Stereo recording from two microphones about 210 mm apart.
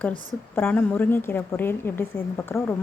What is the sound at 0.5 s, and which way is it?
Speech, 5° left (ahead or behind).